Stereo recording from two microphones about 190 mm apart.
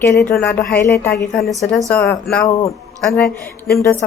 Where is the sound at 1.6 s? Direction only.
5° left (ahead or behind).